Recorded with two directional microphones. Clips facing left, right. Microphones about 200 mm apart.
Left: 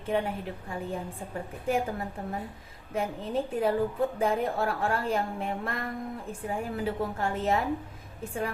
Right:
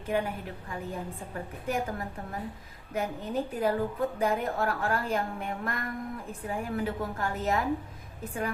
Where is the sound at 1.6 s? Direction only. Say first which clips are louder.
Left 3 dB; 30° left (ahead or behind).